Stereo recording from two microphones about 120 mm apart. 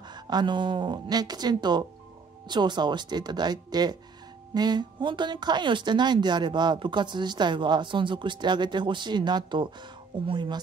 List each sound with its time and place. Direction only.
0.1 s speech: 35° right (ahead or behind)